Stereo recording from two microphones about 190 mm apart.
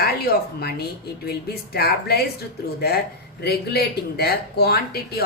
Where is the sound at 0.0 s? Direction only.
55° left (ahead or behind).